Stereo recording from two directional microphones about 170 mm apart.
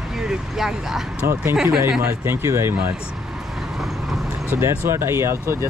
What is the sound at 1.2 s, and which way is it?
Speech, 15° right (ahead or behind).